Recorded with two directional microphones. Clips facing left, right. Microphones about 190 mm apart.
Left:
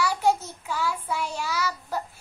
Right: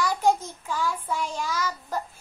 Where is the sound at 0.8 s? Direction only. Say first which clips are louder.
Even; 10° left (ahead or behind).